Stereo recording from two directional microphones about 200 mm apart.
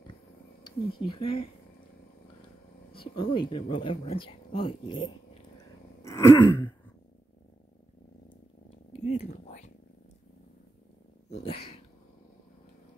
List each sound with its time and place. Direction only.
0.7 s speech: 25° left (ahead or behind)
2.9 s speech: 25° left (ahead or behind)
6.0 s a sound: 15° left (ahead or behind)
9.0 s whispering: 35° left (ahead or behind)
11.2 s cat: 30° left (ahead or behind)